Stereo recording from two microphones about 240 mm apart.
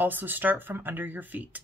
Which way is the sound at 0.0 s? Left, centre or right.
Centre.